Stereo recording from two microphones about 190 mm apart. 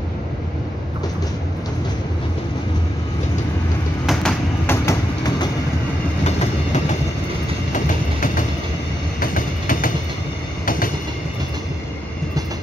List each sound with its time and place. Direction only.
4.0 s a sound: centre (ahead or behind)
4.8 s train: 20° left (ahead or behind)
6.2 s train: 35° left (ahead or behind)